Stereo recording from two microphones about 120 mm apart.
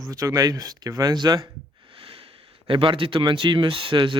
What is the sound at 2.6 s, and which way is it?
Speech, 45° right (ahead or behind).